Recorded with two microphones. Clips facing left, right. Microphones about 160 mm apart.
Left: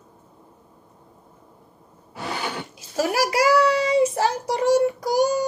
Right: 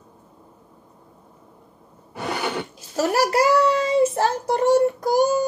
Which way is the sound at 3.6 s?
55° right (ahead or behind).